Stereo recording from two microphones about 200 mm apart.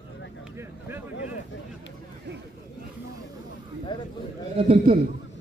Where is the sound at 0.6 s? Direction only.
10° right (ahead or behind).